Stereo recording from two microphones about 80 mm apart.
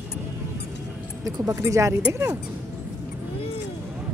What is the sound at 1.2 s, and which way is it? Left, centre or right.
Speech, right.